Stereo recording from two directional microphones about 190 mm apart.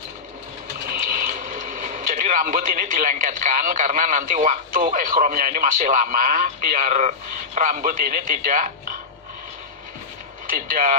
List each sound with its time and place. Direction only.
1.1 s a man's voice: 45° right (ahead or behind)
10.7 s speech: 45° right (ahead or behind)